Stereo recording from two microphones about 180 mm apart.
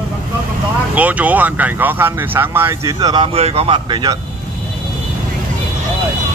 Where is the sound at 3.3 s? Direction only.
35° right (ahead or behind).